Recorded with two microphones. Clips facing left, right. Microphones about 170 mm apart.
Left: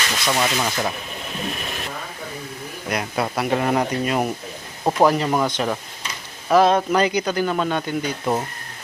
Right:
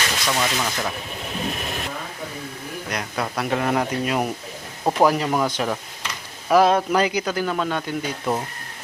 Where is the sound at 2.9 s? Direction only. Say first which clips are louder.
Left 4 dB; 10° left (ahead or behind).